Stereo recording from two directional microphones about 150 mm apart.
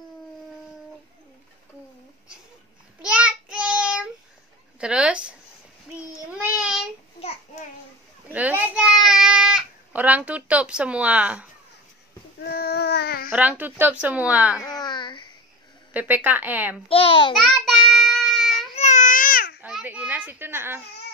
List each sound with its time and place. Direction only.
3.0 s child singing: 5° right (ahead or behind)
4.7 s a woman's voice: 5° right (ahead or behind)
6.3 s child singing: 10° right (ahead or behind)
7.2 s babbling: 45° left (ahead or behind)
8.3 s a sound: 10° right (ahead or behind)
12.4 s a sound: 90° left
13.3 s speech: 10° right (ahead or behind)
14.6 s a sound: 25° left (ahead or behind)
15.9 s speech: 10° right (ahead or behind)
16.9 s a child's voice: 40° left (ahead or behind)
17.3 s child singing: centre (ahead or behind)
18.8 s baby cry: 55° left (ahead or behind); by 19.5 s 70° left (ahead or behind)
19.6 s a sound: 10° right (ahead or behind)